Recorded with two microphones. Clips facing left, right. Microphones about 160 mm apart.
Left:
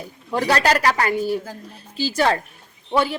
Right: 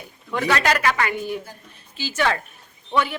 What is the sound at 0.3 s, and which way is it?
Speech, 35° left (ahead or behind).